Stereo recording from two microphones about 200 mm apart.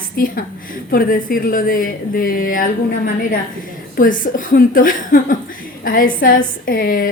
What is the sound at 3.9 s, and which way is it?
A woman's voice, 45° left (ahead or behind).